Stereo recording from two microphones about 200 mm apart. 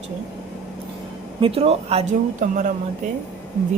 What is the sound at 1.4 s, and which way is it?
Speech, 25° right (ahead or behind).